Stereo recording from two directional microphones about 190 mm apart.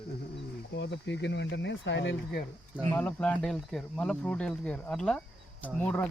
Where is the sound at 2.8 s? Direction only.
10° left (ahead or behind).